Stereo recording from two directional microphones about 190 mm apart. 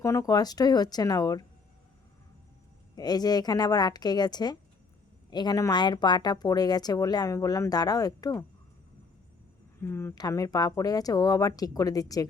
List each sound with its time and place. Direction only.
0.0 s speech: 15° left (ahead or behind)
2.9 s speech: 20° left (ahead or behind)
9.8 s speech: 15° left (ahead or behind)